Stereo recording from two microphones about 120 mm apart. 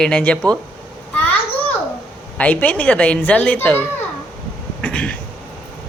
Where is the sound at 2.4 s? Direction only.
15° left (ahead or behind).